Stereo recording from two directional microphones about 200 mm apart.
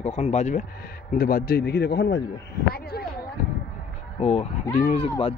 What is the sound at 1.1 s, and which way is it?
A man's voice, 50° left (ahead or behind).